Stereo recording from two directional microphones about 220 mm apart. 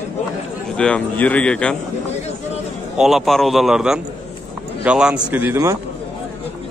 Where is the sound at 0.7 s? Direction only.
5° left (ahead or behind).